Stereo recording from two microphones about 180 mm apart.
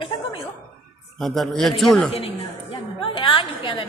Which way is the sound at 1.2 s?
Centre (ahead or behind).